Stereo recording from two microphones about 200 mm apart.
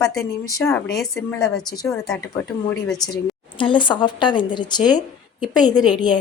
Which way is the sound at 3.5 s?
25° left (ahead or behind).